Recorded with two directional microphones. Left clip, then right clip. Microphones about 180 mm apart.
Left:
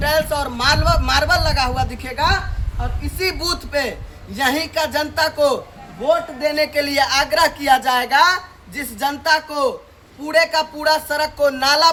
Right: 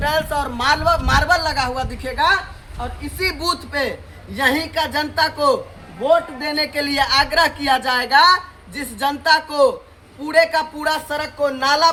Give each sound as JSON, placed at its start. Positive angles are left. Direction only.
{"t": 0.0, "sound": "a man's voice", "side_deg": 5}